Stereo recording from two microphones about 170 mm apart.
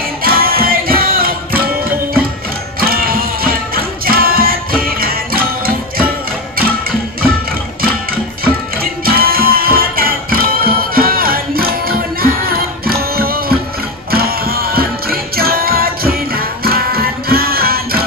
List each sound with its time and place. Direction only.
0.2 s music: 60° right (ahead or behind)
8.8 s music: 60° right (ahead or behind)